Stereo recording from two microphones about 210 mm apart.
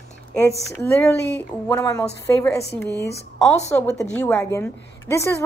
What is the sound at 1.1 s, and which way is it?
Speech, 55° left (ahead or behind).